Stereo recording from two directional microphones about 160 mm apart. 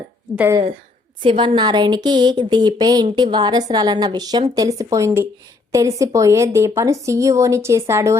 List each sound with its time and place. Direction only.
1.2 s a woman's voice: 30° right (ahead or behind)